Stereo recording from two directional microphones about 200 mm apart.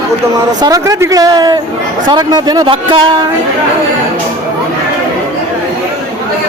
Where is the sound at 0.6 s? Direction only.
15° right (ahead or behind).